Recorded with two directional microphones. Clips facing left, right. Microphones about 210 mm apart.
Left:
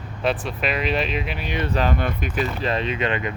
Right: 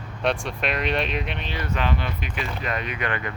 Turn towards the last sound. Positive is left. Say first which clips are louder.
# left 5 dB
turn(degrees=20)  # may be behind; listen again after turning